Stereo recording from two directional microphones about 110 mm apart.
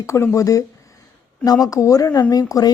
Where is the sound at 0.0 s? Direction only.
25° left (ahead or behind).